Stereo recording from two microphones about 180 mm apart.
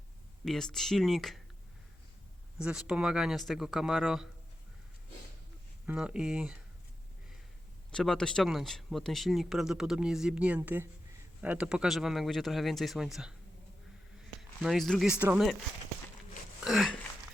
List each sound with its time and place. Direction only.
0.4 s speech: 5° left (ahead or behind)
2.6 s speech: 5° right (ahead or behind)
5.8 s speech: 5° right (ahead or behind)
7.9 s speech: 5° left (ahead or behind)
14.6 s speech: centre (ahead or behind)
16.6 s dog: centre (ahead or behind)